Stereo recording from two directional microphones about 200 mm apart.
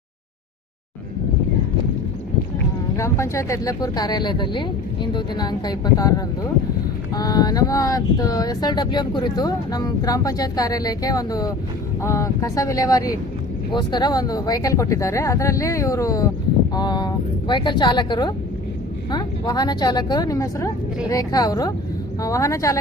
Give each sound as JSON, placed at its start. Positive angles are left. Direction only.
{"t": 2.9, "sound": "speech", "side_deg": 15}